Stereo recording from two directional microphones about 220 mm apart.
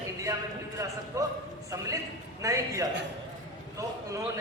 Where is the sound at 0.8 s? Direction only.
15° right (ahead or behind).